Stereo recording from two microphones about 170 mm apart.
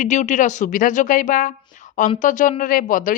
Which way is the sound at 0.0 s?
45° left (ahead or behind).